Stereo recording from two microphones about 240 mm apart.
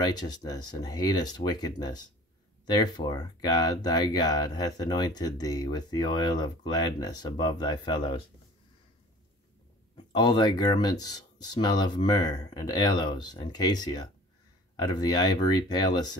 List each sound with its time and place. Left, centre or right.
0.0 s speech: centre
10.1 s speech: centre